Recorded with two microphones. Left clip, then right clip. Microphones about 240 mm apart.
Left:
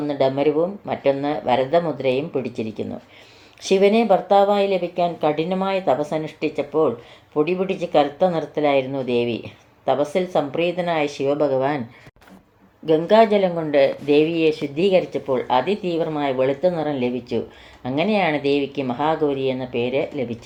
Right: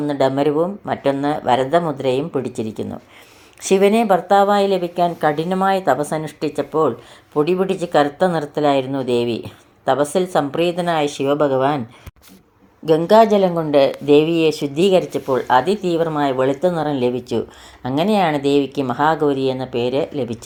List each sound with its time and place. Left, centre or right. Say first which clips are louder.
0.1 s speech: right 2 dB; right
12.8 s speech: right 3 dB; right